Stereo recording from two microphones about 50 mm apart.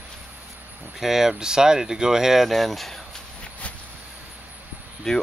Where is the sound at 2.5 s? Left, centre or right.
Centre.